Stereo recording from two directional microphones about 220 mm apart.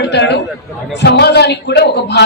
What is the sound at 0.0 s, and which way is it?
A man's voice, 50° left (ahead or behind).